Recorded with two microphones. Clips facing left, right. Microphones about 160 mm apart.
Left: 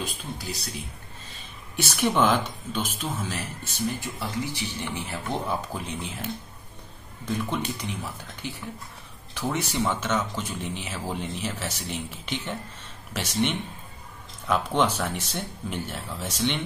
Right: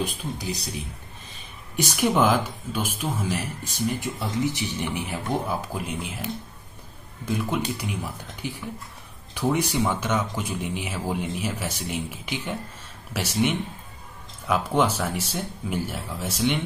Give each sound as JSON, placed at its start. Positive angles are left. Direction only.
{"t": 0.0, "sound": "speech", "side_deg": -15}
{"t": 1.8, "sound": "speech", "side_deg": -10}